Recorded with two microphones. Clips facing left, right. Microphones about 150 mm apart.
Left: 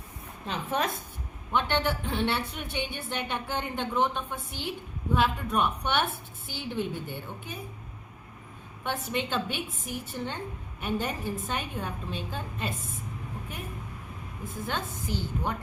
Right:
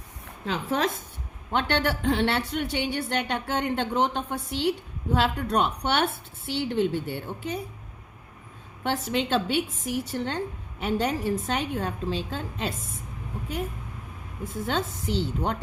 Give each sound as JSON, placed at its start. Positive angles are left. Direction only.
{"t": 0.4, "sound": "a woman's voice", "side_deg": -90}
{"t": 1.5, "sound": "a woman's voice", "side_deg": -70}
{"t": 8.8, "sound": "a woman's voice", "side_deg": -85}
{"t": 14.4, "sound": "a woman's voice", "side_deg": -75}